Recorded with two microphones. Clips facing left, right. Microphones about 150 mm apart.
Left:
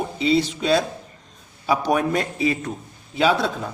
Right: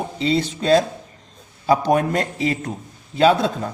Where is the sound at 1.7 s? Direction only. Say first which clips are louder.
Right 3 dB; 45° right (ahead or behind).